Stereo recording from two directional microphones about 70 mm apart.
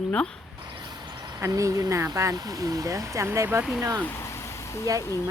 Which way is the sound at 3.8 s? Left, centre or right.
Right.